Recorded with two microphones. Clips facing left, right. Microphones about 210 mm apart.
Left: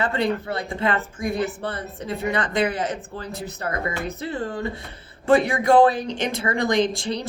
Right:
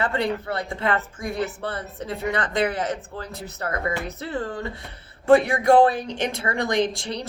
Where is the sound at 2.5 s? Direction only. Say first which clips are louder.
Left 1 dB; 15° left (ahead or behind).